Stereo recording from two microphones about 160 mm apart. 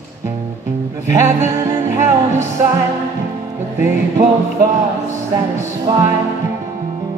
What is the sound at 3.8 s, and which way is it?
Music, 15° right (ahead or behind).